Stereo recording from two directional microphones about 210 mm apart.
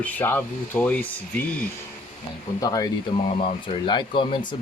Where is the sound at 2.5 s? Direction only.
15° left (ahead or behind).